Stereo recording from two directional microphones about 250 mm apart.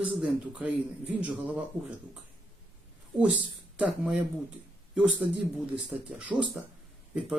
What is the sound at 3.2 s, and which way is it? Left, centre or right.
Speech, centre.